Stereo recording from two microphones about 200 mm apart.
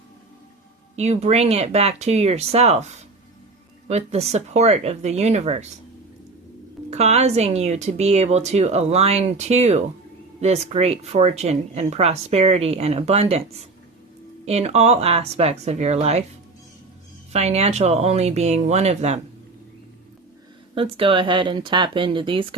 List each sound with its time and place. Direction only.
0.9 s speech: 35° right (ahead or behind)
6.9 s speech: 35° right (ahead or behind)
17.3 s speech: 30° right (ahead or behind)
20.7 s speech: 25° right (ahead or behind)